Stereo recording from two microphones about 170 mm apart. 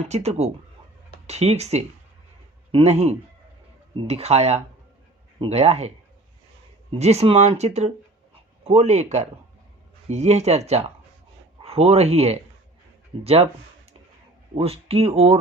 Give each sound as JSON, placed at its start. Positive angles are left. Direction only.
{"t": 0.1, "sound": "speech", "side_deg": -40}
{"t": 7.0, "sound": "speech", "side_deg": -40}
{"t": 14.5, "sound": "speech", "side_deg": -35}